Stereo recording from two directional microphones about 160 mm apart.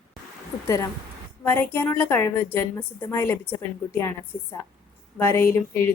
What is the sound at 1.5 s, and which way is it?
A woman's voice, 10° left (ahead or behind).